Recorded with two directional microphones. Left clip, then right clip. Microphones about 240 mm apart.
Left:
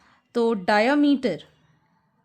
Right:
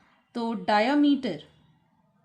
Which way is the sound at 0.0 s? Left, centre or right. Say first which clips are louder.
Left 10 dB; left.